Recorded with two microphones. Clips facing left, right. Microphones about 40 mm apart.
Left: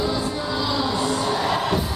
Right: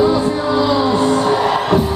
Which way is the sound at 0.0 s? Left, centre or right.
Right.